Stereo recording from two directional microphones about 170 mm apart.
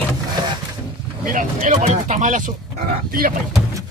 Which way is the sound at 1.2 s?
50° right (ahead or behind).